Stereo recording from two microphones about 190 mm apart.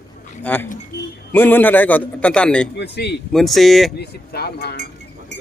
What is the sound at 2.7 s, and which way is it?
Speech, 60° left (ahead or behind).